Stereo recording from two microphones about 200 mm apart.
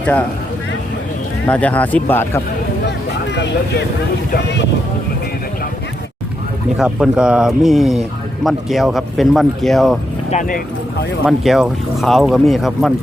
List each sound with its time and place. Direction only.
0.0 s speech: 5° left (ahead or behind)
1.5 s speech: 5° left (ahead or behind)
3.3 s speech: 60° left (ahead or behind)
6.7 s speech: 5° right (ahead or behind)
11.3 s speech: centre (ahead or behind)